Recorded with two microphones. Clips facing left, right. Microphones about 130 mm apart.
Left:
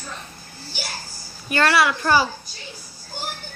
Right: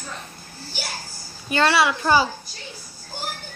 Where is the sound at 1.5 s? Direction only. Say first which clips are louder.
Even; 25° right (ahead or behind).